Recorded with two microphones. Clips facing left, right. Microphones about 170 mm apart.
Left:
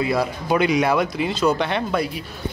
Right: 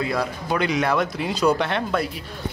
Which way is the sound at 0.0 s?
10° left (ahead or behind).